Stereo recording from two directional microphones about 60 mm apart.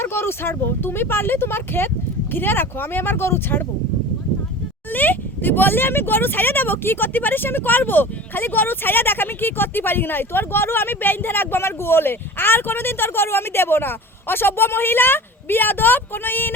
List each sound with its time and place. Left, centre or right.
0.0 s speech: left
4.9 s speech: left